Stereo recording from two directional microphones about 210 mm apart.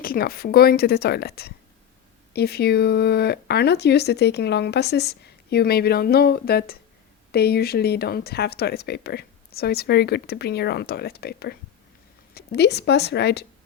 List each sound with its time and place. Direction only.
0.0 s a woman's voice: 45° left (ahead or behind)